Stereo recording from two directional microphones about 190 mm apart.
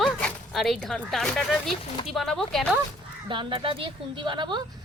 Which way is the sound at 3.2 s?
25° right (ahead or behind).